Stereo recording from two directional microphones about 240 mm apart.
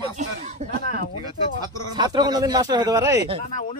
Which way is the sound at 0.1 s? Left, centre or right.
Right.